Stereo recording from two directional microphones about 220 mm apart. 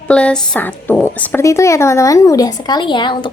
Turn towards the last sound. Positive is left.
turn(degrees=20)  # may be behind; listen again after turning